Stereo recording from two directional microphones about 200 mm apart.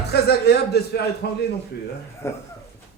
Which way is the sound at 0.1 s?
55° left (ahead or behind).